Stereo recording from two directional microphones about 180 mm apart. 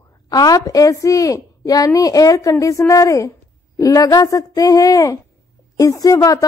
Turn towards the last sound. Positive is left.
turn(degrees=15)  # may be behind; listen again after turning